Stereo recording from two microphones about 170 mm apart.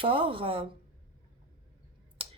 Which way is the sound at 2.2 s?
30° right (ahead or behind).